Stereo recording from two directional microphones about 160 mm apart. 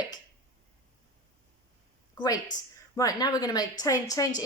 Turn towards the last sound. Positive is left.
turn(degrees=20)  # may be behind; listen again after turning